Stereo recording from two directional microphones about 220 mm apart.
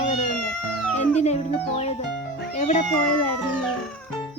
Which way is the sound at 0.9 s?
30° left (ahead or behind).